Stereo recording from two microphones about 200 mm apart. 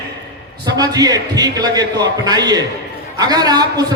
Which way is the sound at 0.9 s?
20° right (ahead or behind).